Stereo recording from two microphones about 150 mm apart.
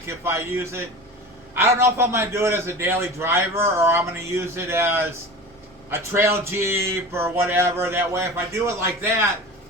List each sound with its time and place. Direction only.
0.3 s a man's voice: 15° right (ahead or behind)